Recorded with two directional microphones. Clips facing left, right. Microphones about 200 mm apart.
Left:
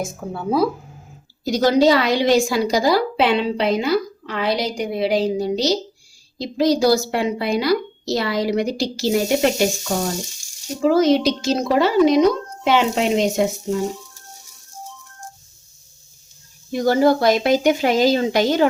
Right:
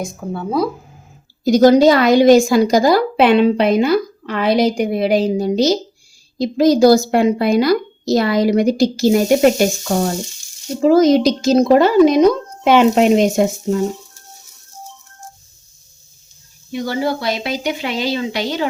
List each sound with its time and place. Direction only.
0.0 s speech: 5° left (ahead or behind)
1.5 s a woman's voice: 50° right (ahead or behind)
10.8 s a woman's voice: 40° right (ahead or behind)
16.7 s speech: 45° left (ahead or behind)